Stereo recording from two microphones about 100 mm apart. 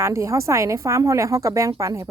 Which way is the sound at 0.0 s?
30° right (ahead or behind).